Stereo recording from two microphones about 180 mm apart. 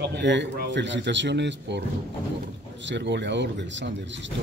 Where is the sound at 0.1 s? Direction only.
80° right.